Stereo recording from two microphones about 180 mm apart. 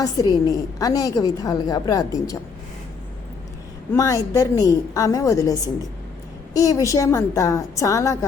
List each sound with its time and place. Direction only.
0.0 s a woman's voice: 20° left (ahead or behind)
3.9 s a woman's voice: 20° left (ahead or behind)